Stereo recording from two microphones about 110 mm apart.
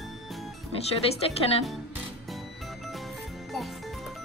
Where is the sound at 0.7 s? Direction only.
65° left (ahead or behind).